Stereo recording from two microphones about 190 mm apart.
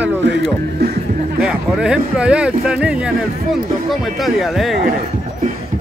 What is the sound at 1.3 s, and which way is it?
Speech, 5° right (ahead or behind).